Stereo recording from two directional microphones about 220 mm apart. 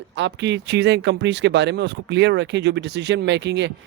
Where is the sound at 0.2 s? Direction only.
55° right (ahead or behind).